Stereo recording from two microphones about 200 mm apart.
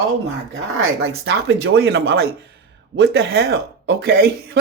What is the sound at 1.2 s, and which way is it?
Speech, 55° right (ahead or behind).